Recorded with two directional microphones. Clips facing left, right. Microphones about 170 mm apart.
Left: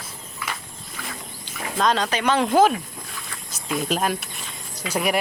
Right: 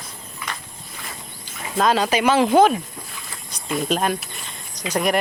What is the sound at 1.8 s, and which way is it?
Speech, 5° right (ahead or behind).